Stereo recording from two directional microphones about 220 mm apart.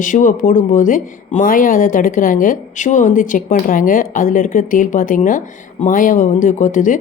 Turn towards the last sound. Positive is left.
turn(degrees=35)  # may be behind; listen again after turning